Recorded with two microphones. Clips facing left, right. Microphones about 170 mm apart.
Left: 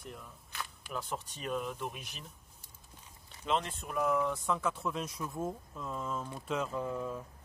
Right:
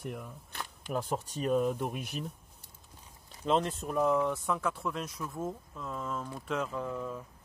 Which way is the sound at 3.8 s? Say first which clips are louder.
Right 3 dB; 25° right (ahead or behind).